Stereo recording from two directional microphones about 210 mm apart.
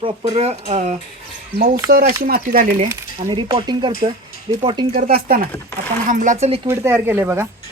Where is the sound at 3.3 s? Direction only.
20° right (ahead or behind).